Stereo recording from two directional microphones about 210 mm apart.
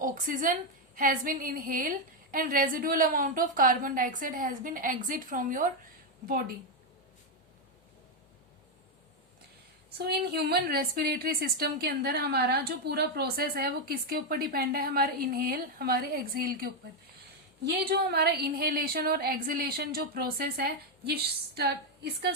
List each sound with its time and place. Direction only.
0.0 s a woman's voice: 40° right (ahead or behind)
10.0 s a woman's voice: 50° right (ahead or behind)